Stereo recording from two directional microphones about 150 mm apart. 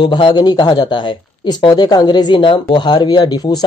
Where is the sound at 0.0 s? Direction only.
30° left (ahead or behind).